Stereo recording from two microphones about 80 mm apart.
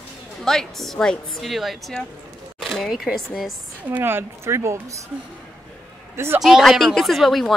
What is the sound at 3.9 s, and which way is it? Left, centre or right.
Speech, right.